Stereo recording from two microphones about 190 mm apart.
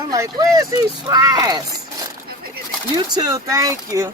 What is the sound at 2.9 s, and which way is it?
Speech, 20° right (ahead or behind).